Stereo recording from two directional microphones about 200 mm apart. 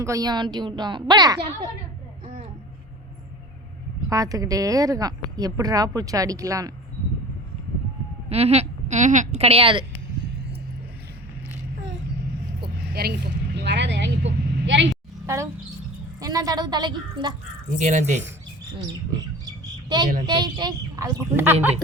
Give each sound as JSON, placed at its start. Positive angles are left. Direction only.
{"t": 0.0, "sound": "a woman's voice", "side_deg": -15}
{"t": 4.1, "sound": "speech", "side_deg": -15}
{"t": 8.3, "sound": "a woman's voice", "side_deg": -30}
{"t": 12.6, "sound": "vehicle", "side_deg": -50}
{"t": 16.2, "sound": "a woman's voice", "side_deg": -20}
{"t": 17.7, "sound": "a woman's voice", "side_deg": -35}
{"t": 20.2, "sound": "a woman's voice", "side_deg": -20}